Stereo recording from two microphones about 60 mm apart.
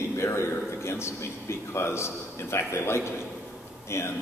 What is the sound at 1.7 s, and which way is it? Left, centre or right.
A man's voice, left.